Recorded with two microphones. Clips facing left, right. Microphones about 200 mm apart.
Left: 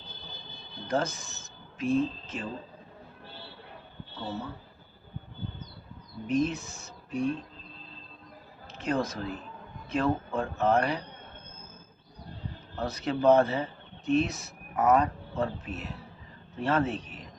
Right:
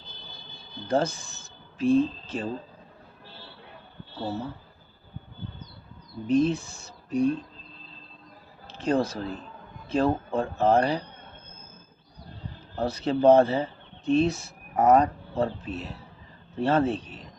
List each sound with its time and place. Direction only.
0.9 s speech: 30° right (ahead or behind)
6.2 s speech: 30° right (ahead or behind)
8.6 s a sound: 30° right (ahead or behind)
9.9 s speech: 30° right (ahead or behind)
12.7 s speech: 30° right (ahead or behind)